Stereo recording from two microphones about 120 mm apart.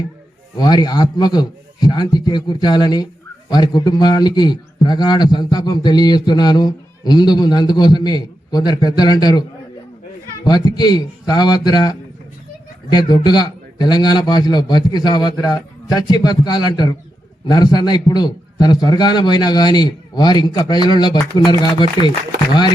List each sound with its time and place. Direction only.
0.5 s a man's voice: 35° left (ahead or behind)
10.4 s a man's voice: 35° left (ahead or behind)